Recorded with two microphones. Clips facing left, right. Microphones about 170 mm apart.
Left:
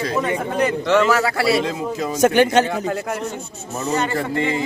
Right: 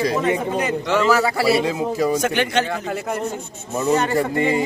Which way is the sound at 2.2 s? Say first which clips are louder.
Left 6 dB; 45° left (ahead or behind).